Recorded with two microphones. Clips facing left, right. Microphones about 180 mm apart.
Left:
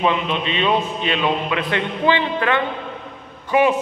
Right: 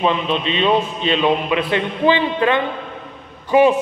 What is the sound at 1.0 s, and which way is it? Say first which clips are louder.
A man's voice: right 4 dB; 20° right (ahead or behind).